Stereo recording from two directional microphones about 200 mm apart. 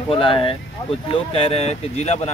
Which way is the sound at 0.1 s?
25° left (ahead or behind).